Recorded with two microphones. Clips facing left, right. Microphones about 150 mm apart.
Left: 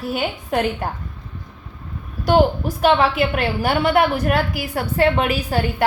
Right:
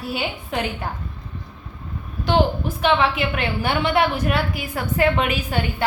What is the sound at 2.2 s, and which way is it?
A woman's voice, 45° left (ahead or behind).